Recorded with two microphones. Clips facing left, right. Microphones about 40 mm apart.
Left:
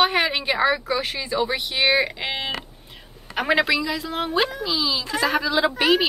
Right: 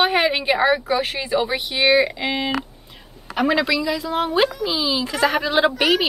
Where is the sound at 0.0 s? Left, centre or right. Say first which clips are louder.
Right 2 dB; right.